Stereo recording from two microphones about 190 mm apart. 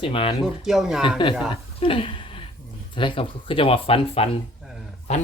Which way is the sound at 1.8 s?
30° left (ahead or behind).